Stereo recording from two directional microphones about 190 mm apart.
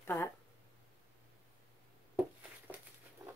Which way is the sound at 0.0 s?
10° left (ahead or behind).